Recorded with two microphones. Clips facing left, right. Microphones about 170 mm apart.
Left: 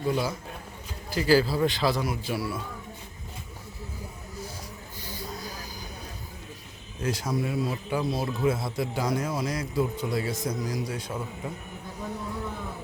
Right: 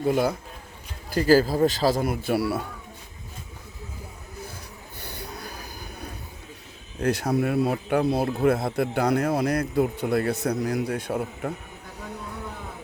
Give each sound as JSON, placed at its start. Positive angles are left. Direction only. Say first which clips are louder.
{"t": 0.0, "sound": "speech", "louder": "right 5 dB", "side_deg": -55}
{"t": 1.1, "sound": "a man's voice", "louder": "right 3 dB", "side_deg": -45}
{"t": 4.9, "sound": "a sound", "louder": "even", "side_deg": -65}
{"t": 7.0, "sound": "speech", "louder": "right 5 dB", "side_deg": -60}